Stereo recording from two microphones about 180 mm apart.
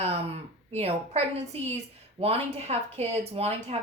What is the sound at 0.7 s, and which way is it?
Speech, 35° right (ahead or behind).